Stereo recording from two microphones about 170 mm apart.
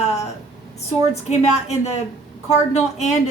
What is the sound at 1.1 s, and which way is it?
A woman's voice, 40° left (ahead or behind).